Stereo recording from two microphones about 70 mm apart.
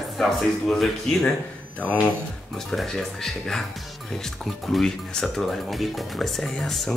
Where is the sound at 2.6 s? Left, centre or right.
Centre.